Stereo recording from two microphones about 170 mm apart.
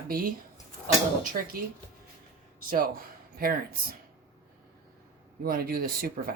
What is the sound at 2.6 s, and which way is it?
Speech, 55° right (ahead or behind).